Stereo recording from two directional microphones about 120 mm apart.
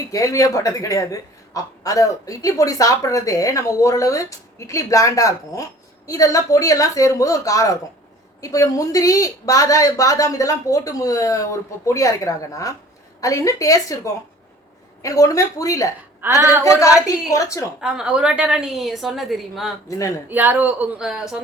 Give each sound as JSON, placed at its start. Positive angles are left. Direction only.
{"t": 0.1, "sound": "a man's voice", "side_deg": 25}
{"t": 16.2, "sound": "a woman's voice", "side_deg": -20}
{"t": 17.1, "sound": "a man's voice", "side_deg": 25}
{"t": 17.7, "sound": "a woman's voice", "side_deg": -5}
{"t": 20.3, "sound": "speech", "side_deg": -15}